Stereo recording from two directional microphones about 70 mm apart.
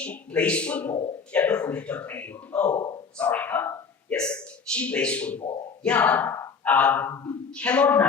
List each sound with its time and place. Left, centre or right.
0.0 s a man's voice: centre
4.1 s a man's voice: centre